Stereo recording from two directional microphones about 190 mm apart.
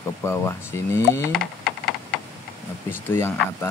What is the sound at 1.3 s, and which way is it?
Speech, centre (ahead or behind).